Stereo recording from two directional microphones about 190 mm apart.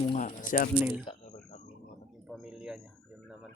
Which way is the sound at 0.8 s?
10° right (ahead or behind).